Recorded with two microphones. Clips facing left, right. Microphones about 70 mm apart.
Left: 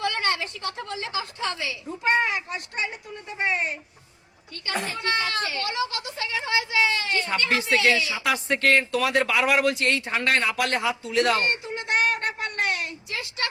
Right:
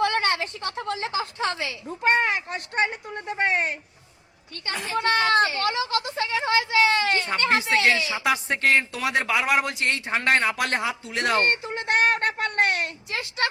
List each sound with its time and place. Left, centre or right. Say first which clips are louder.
0.0 s a woman's voice: right 3 dB; right
2.2 s speech: right 1 dB; right
5.0 s speech: right 8 dB; right
8.2 s a man's voice: even; centre
9.6 s a man's voice: left 3 dB; right
11.1 s a sound: even; right
13.1 s a woman's voice: right 4 dB; right